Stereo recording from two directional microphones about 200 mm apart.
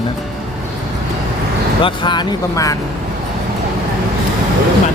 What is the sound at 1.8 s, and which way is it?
Speech, 20° left (ahead or behind).